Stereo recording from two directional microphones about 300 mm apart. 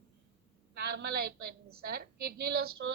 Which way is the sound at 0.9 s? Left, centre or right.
Right.